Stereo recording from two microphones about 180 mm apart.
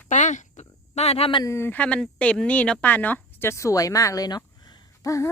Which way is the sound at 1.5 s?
15° left (ahead or behind).